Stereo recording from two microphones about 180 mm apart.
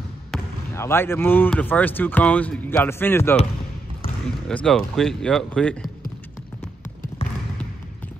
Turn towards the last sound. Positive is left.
turn(degrees=35)  # may be behind; listen again after turning